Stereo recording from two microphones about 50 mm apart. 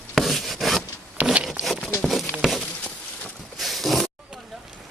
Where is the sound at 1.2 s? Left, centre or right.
Right.